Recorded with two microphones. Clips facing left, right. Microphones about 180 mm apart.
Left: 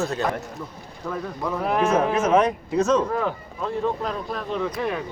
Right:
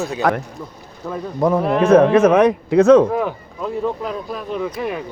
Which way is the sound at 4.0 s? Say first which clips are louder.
Right 2 dB; 5° right (ahead or behind).